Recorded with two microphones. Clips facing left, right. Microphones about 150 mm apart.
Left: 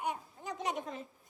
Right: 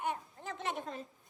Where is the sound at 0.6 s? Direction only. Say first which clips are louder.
Left 2 dB; 20° left (ahead or behind).